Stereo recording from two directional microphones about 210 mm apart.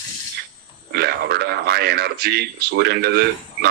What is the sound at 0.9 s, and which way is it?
Speech, 50° right (ahead or behind).